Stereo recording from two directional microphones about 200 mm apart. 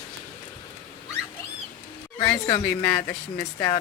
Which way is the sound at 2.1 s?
20° left (ahead or behind).